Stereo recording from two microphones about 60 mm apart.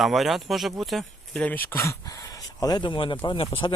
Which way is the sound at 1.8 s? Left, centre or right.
Left.